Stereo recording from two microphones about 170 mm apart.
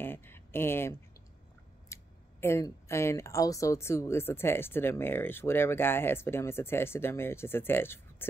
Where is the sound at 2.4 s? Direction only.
15° left (ahead or behind).